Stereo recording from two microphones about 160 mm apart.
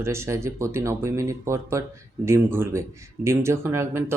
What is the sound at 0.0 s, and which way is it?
Speech, 15° right (ahead or behind).